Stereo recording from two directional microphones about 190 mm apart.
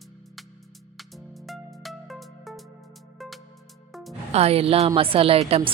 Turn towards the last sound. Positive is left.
turn(degrees=-30)  # may be behind; listen again after turning